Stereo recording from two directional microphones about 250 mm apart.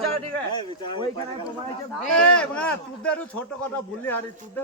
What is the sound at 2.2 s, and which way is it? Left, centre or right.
Speech, centre.